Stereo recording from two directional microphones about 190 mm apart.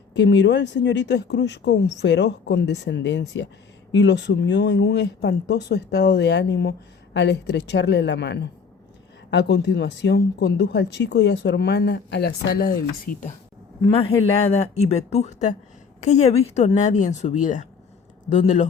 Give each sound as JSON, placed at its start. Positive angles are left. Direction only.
{"t": 0.2, "sound": "speech", "side_deg": 65}
{"t": 14.6, "sound": "speech", "side_deg": 35}